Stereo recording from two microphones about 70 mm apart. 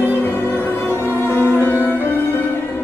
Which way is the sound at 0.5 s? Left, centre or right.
Left.